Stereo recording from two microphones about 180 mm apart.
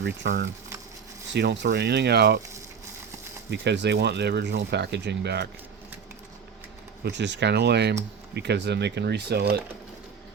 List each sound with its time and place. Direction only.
0.2 s speech: 75° right (ahead or behind)
3.5 s speech: 70° right (ahead or behind)
7.0 s speech: 75° right (ahead or behind)